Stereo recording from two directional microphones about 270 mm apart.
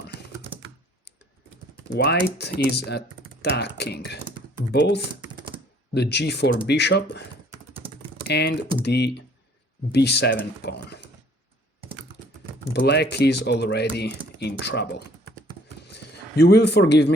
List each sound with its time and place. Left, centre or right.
0.1 s computer keyboard: centre
2.0 s speech: left
5.9 s speech: left
8.3 s speech: left
12.7 s speech: left